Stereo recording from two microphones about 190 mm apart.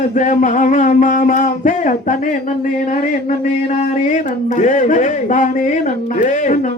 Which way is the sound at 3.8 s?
40° left (ahead or behind).